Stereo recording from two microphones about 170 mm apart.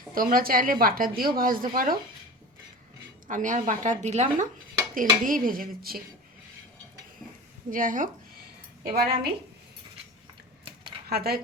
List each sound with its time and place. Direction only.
0.1 s a woman's voice: 55° right (ahead or behind)
3.2 s a woman's voice: 50° right (ahead or behind)
4.9 s a woman's voice: 55° right (ahead or behind)
7.7 s a woman's voice: 50° right (ahead or behind)
8.9 s a woman's voice: 65° right (ahead or behind)
11.1 s a woman's voice: 65° right (ahead or behind)